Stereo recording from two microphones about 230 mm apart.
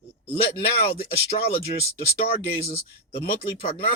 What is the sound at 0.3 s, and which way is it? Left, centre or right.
Speech, left.